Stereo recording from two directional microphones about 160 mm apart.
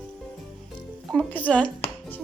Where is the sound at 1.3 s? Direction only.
10° left (ahead or behind).